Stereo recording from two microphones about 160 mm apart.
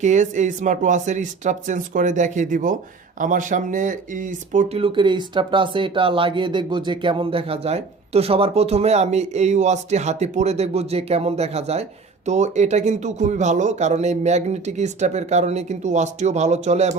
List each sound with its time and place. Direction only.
0.0 s speech: 50° right (ahead or behind)
4.8 s speech: 30° right (ahead or behind)